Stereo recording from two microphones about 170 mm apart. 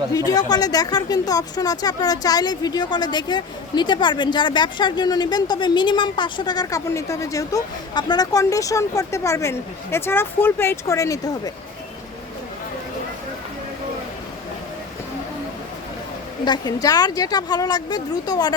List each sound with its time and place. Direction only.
0.3 s a woman's voice: 20° left (ahead or behind)
16.4 s a woman's voice: 25° left (ahead or behind)